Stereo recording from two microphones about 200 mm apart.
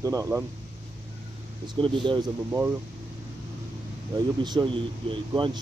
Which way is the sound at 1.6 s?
25° right (ahead or behind).